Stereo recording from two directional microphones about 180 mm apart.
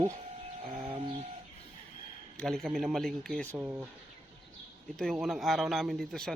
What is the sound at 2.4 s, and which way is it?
A man's voice, 5° left (ahead or behind).